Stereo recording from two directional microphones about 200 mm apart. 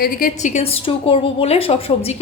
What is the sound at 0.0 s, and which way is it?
A woman's voice, 45° left (ahead or behind).